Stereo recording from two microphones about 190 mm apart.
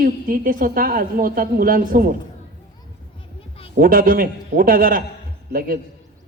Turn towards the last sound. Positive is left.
turn(degrees=-50)  # may be behind; listen again after turning